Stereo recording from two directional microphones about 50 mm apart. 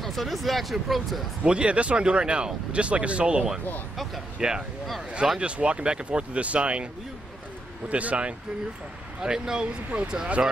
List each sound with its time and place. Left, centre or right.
0.0 s speech: centre
1.4 s speech: right
3.9 s speech: centre
4.4 s speech: centre
7.9 s speech: right